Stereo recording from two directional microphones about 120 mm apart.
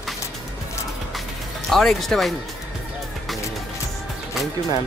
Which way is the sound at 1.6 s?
Centre (ahead or behind).